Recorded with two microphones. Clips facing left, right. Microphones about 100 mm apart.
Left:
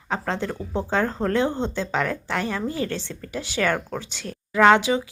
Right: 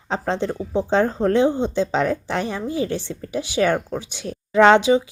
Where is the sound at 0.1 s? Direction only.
20° right (ahead or behind).